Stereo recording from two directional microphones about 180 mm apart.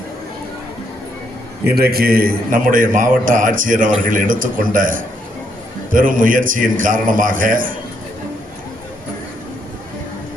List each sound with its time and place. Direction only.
1.6 s a man's voice: 60° right (ahead or behind)